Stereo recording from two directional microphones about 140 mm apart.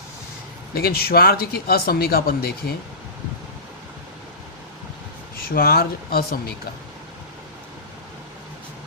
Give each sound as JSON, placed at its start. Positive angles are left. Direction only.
{"t": 0.7, "sound": "speech", "side_deg": 90}
{"t": 5.5, "sound": "speech", "side_deg": 90}